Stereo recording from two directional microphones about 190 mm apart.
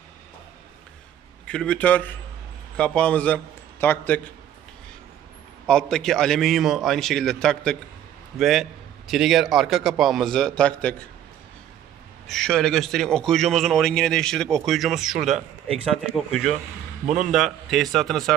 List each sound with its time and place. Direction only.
1.5 s a man's voice: 5° left (ahead or behind)
5.6 s a man's voice: 5° left (ahead or behind)
12.3 s a man's voice: 5° left (ahead or behind)